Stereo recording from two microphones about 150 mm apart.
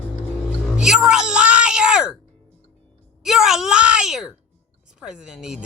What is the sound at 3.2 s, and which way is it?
Speech, 5° right (ahead or behind).